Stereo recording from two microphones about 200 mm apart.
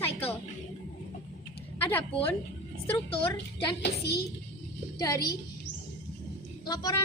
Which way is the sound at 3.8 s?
55° left (ahead or behind).